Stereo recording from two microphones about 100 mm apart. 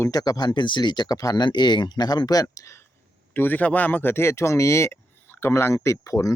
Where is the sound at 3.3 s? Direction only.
20° left (ahead or behind).